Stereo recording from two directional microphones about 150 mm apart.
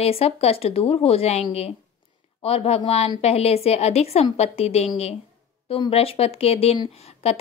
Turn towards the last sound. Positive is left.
turn(degrees=45)  # may be behind; listen again after turning